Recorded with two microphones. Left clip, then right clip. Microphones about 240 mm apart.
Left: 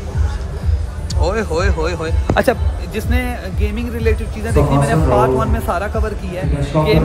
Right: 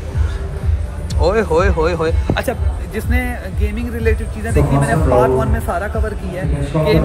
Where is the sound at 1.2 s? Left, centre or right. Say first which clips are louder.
Right 4 dB; centre.